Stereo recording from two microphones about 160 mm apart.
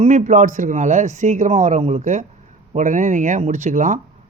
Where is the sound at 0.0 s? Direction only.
50° right (ahead or behind).